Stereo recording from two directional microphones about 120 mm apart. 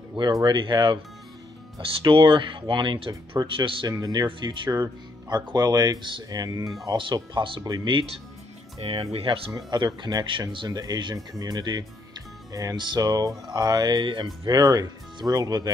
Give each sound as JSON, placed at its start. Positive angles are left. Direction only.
{"t": 0.1, "sound": "speech", "side_deg": -35}
{"t": 7.3, "sound": "speech", "side_deg": -45}
{"t": 8.8, "sound": "speech", "side_deg": -55}
{"t": 9.7, "sound": "speech", "side_deg": -35}